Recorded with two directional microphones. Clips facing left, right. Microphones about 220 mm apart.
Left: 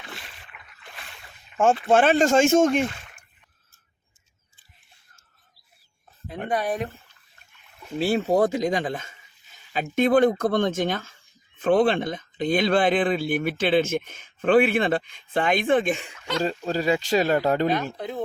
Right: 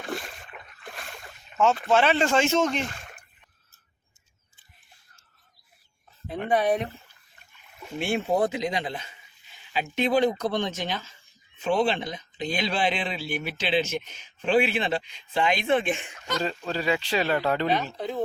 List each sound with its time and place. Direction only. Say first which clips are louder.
0.0 s boat: right 9 dB; 50° right (ahead or behind)
1.5 s speech: left 3 dB; 50° left (ahead or behind)
2.9 s a sound: right 2 dB; 45° right (ahead or behind)
7.9 s speech: left 4 dB; 35° left (ahead or behind)